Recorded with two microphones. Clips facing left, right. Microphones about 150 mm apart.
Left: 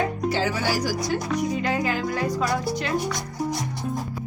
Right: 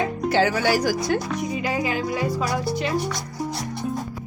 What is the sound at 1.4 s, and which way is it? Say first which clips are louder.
Speech: left 1 dB; 5° right (ahead or behind).